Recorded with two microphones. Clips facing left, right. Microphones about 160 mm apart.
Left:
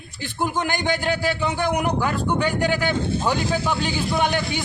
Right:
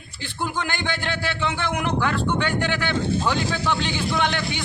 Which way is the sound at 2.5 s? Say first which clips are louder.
Left 3 dB; 40° left (ahead or behind).